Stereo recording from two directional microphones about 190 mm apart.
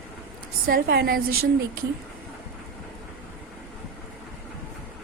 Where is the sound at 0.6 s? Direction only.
55° right (ahead or behind).